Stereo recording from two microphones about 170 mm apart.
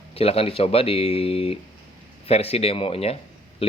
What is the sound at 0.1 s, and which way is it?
Speech, 35° left (ahead or behind).